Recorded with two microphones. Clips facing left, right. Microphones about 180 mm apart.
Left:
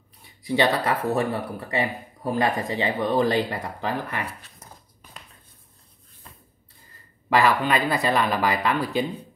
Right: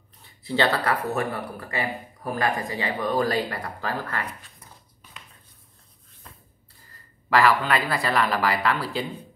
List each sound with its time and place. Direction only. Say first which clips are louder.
0.2 s speech: left 2 dB; 15° left (ahead or behind)
4.6 s dog: left 4 dB; 40° left (ahead or behind)
7.2 s speech: even; 20° left (ahead or behind)